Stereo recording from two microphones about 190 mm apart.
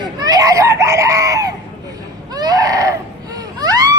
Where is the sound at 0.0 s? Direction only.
20° right (ahead or behind).